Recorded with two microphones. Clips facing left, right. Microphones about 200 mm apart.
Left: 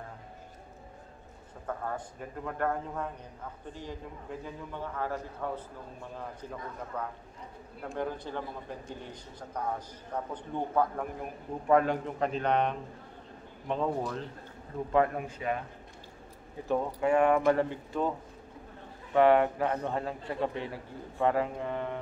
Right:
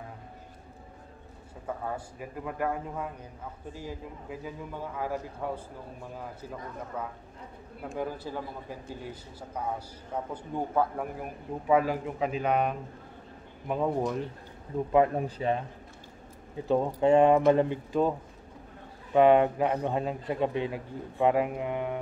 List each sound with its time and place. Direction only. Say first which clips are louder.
1.7 s a man's voice: right 1 dB; 10° right (ahead or behind)
6.9 s a man's voice: even; 5° right (ahead or behind)
15.1 s speech: right 4 dB; 30° right (ahead or behind)
16.6 s speech: right 4 dB; 25° right (ahead or behind)
19.1 s a man's voice: right 2 dB; 20° right (ahead or behind)